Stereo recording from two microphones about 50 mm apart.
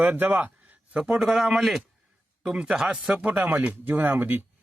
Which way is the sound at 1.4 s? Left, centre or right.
Centre.